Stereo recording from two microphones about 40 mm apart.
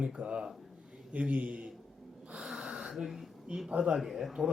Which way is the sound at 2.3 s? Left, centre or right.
Right.